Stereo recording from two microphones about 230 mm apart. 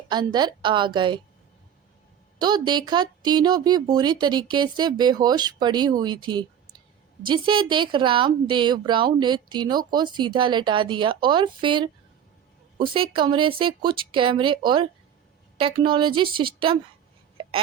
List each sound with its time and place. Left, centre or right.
0.1 s speech: centre
2.4 s speech: centre